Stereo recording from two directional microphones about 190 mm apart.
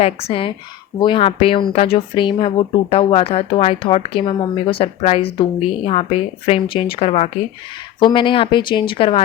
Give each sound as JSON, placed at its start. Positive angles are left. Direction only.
{"t": 0.0, "sound": "speech", "side_deg": 30}